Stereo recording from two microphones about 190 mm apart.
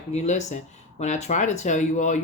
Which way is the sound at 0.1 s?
35° left (ahead or behind).